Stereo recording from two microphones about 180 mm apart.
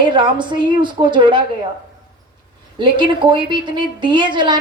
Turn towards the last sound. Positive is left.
turn(degrees=-25)  # may be behind; listen again after turning